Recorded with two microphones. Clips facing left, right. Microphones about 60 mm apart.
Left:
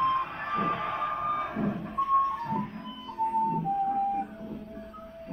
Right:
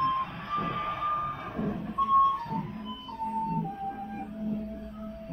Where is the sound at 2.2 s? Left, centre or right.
Centre.